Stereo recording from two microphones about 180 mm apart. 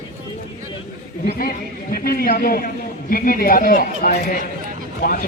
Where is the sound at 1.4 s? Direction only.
50° left (ahead or behind).